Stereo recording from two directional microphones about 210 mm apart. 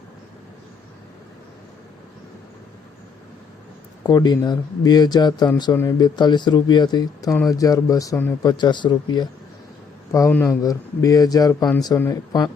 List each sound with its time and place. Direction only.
4.0 s speech: 20° left (ahead or behind)